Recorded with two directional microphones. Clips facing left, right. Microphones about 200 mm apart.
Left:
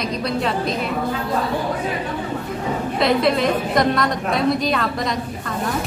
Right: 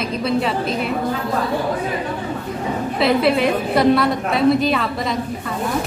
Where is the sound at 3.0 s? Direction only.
5° right (ahead or behind).